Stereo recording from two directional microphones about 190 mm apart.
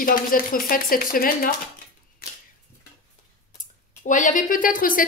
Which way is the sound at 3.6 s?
40° left (ahead or behind).